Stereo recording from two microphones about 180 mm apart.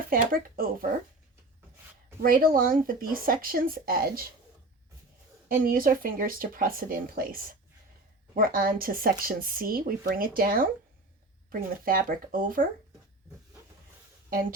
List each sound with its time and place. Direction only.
0.1 s speech: 50° right (ahead or behind)
2.2 s speech: 50° right (ahead or behind)
5.5 s speech: 50° right (ahead or behind)
11.9 s speech: 50° right (ahead or behind)